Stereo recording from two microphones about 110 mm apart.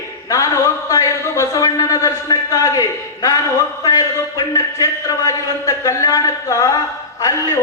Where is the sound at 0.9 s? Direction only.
30° left (ahead or behind).